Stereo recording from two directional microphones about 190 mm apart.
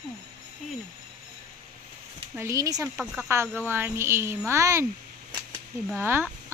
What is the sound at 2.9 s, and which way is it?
Speech, 5° right (ahead or behind).